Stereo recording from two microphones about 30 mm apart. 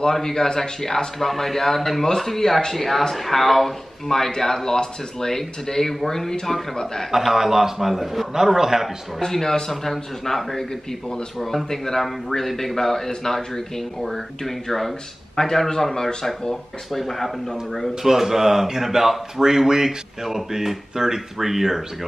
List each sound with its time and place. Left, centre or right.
0.0 s speech: centre
7.1 s speech: centre
9.2 s speech: centre
17.1 s speech: centre
18.0 s speech: centre